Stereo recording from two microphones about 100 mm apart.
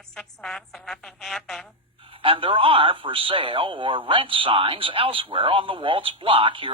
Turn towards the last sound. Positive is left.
turn(degrees=-60)  # may be behind; listen again after turning